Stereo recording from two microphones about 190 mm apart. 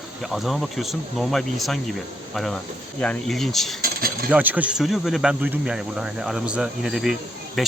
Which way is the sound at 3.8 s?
50° right (ahead or behind).